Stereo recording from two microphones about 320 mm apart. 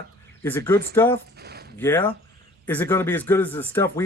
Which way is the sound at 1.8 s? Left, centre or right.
Centre.